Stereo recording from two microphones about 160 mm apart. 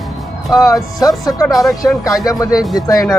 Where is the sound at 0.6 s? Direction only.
20° left (ahead or behind).